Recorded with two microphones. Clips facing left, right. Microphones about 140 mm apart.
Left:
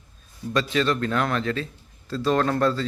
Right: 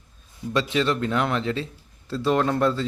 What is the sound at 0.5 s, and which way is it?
A man's voice, 20° right (ahead or behind).